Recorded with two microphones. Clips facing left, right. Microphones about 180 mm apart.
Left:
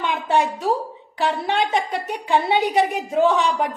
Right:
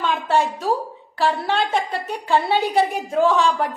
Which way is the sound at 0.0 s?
15° left (ahead or behind).